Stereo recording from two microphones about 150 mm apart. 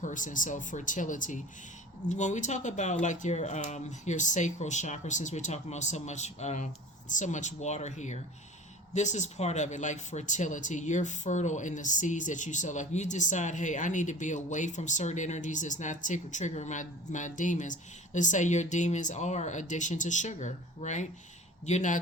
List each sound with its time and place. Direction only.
0.0 s speech: 60° left (ahead or behind)